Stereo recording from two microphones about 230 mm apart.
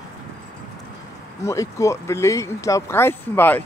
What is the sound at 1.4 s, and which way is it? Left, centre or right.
Speech, centre.